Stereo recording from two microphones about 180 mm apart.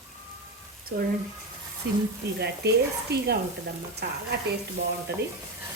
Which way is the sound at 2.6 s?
65° right (ahead or behind).